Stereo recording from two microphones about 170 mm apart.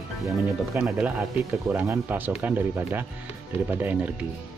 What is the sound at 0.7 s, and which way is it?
Speech, 5° right (ahead or behind).